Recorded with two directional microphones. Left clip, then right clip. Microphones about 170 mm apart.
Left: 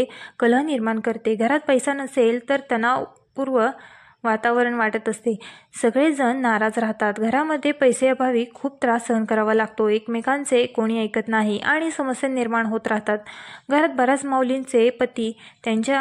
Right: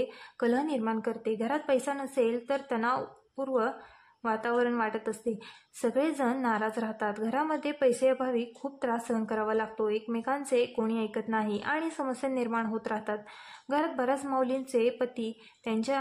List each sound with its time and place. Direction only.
0.0 s a woman's voice: 40° left (ahead or behind)